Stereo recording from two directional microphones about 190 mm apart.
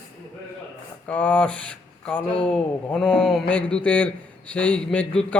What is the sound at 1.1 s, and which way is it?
Speech, 10° left (ahead or behind).